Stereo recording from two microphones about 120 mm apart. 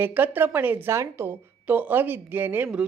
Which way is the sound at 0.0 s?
15° right (ahead or behind).